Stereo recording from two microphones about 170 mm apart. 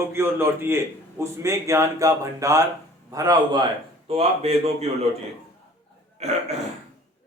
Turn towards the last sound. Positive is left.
turn(degrees=-40)  # may be behind; listen again after turning